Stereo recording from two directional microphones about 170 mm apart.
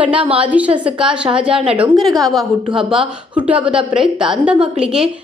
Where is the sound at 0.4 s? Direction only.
10° right (ahead or behind).